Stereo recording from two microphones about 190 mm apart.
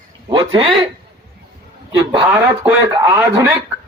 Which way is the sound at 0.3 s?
25° right (ahead or behind).